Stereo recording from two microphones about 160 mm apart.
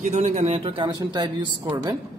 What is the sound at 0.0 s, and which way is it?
Speech, 45° right (ahead or behind).